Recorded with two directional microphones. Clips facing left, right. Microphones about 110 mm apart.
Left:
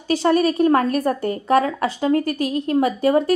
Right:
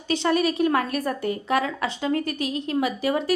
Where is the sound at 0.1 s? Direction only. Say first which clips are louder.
Left 5 dB; 40° left (ahead or behind).